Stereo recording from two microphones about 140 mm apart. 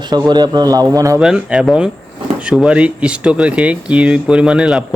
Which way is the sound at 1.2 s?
5° right (ahead or behind).